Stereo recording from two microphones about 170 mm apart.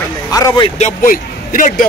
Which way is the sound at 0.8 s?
55° left (ahead or behind).